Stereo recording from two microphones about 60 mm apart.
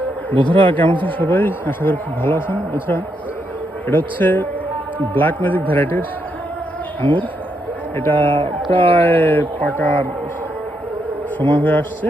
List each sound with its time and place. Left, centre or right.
0.3 s speech: left
11.3 s speech: left